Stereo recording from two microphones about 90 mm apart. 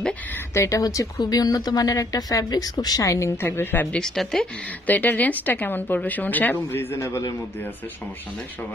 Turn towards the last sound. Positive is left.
turn(degrees=30)  # may be behind; listen again after turning